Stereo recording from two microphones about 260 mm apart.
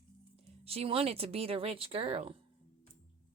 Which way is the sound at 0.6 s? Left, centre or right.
Right.